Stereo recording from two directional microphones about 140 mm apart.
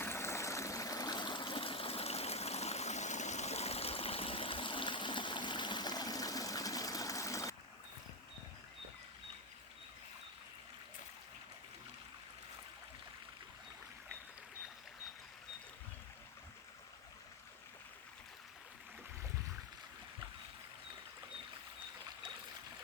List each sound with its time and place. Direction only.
0.0 s stream: 20° left (ahead or behind)